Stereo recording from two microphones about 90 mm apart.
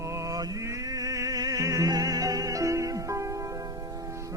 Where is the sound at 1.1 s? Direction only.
40° right (ahead or behind).